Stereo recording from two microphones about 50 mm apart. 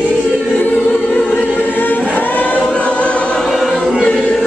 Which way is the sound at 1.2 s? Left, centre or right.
Left.